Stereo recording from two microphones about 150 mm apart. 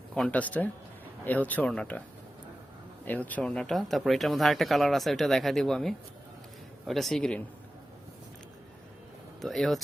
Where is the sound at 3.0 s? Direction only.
10° left (ahead or behind).